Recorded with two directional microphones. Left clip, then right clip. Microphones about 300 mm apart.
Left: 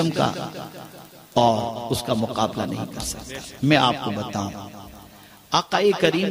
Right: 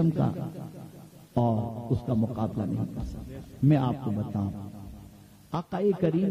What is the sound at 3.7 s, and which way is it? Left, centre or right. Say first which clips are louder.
A man's voice: left 10 dB; centre.